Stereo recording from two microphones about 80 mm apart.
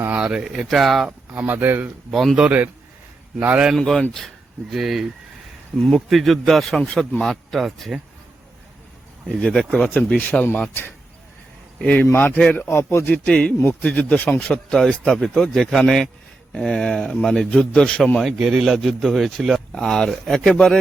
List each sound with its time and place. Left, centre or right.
0.2 s speech: centre
1.0 s speech: right
2.0 s speech: centre
3.4 s a man's voice: centre
3.8 s a man's voice: centre
9.4 s a man's voice: centre
9.9 s speech: centre
11.8 s a man's voice: centre
12.6 s speech: left
13.1 s a man's voice: centre
18.2 s speech: centre